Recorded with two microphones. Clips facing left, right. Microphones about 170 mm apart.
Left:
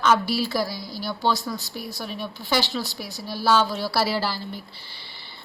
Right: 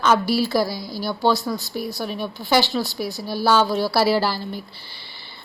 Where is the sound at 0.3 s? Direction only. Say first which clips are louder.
Right 5 dB; 40° right (ahead or behind).